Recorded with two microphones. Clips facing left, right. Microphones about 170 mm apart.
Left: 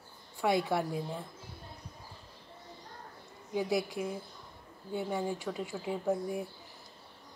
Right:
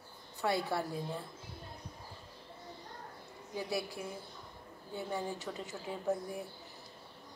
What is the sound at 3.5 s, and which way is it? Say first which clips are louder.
A woman's voice: left 6 dB; 15° left (ahead or behind).